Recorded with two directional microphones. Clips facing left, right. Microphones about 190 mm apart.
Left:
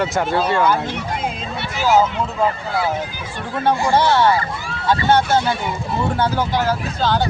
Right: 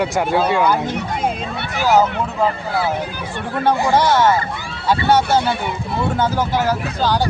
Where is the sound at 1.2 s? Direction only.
55° right (ahead or behind).